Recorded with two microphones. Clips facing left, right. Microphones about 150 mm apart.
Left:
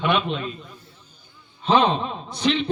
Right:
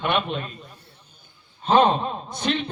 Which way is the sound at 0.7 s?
65° right (ahead or behind).